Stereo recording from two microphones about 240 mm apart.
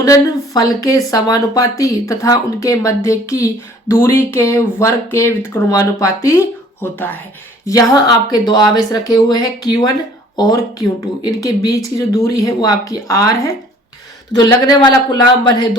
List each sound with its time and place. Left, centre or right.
0.0 s speech: centre